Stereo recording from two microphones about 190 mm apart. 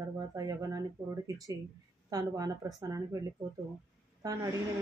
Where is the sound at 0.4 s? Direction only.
20° right (ahead or behind).